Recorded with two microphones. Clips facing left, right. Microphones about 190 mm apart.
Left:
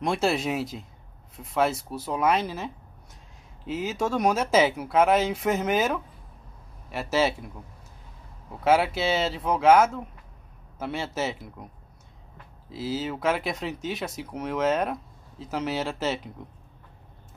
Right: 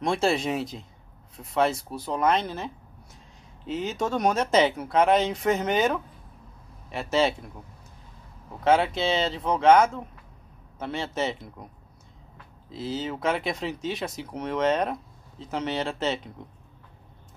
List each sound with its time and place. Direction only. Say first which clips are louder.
0.0 s speech: right 1 dB; 5° left (ahead or behind)
8.6 s speech: even; 5° left (ahead or behind)
12.7 s speech: left 1 dB; 5° left (ahead or behind)